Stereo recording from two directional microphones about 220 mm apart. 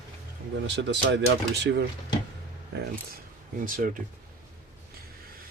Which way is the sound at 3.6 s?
40° right (ahead or behind).